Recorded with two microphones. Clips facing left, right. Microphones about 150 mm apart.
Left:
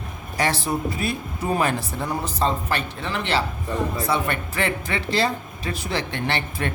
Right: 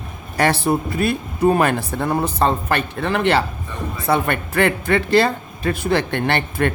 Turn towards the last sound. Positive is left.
turn(degrees=-55)  # may be behind; listen again after turning